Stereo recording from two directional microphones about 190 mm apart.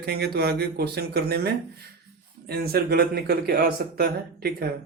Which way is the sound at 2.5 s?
55° right (ahead or behind).